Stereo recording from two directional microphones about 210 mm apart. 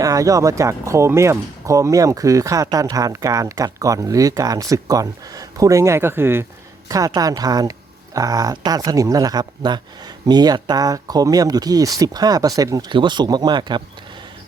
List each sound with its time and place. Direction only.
0.0 s speech: 15° right (ahead or behind)